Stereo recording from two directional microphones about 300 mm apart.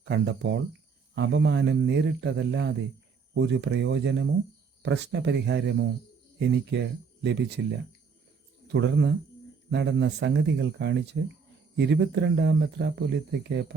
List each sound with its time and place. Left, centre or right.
0.0 s speech: right
8.6 s speech: right